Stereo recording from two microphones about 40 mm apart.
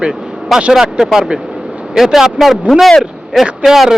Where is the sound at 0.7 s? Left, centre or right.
Centre.